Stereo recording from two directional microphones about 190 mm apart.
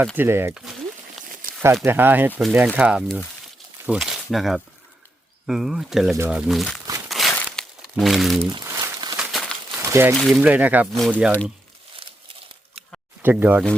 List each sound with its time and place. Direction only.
0.2 s speech: 10° right (ahead or behind)
1.8 s speech: 10° right (ahead or behind)
7.1 s crumpling: centre (ahead or behind)
8.4 s crumpling: 15° right (ahead or behind)
9.1 s crumpling: centre (ahead or behind)
9.7 s a sound: 10° right (ahead or behind)
10.2 s speech: centre (ahead or behind)
10.9 s speech: centre (ahead or behind)
12.0 s crumpling: 30° right (ahead or behind)
13.2 s speech: 10° right (ahead or behind)